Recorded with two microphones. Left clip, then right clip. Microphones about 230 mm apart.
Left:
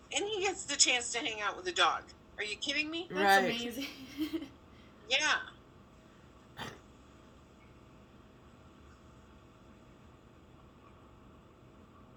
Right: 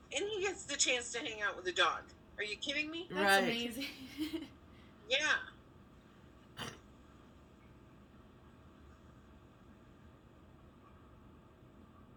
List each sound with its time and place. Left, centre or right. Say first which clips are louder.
0.1 s a woman's voice: left 4 dB; left
3.1 s a woman's voice: left 3 dB; centre
5.0 s a woman's voice: left 3 dB; left